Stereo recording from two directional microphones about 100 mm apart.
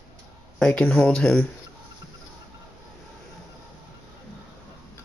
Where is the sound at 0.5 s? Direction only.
5° left (ahead or behind).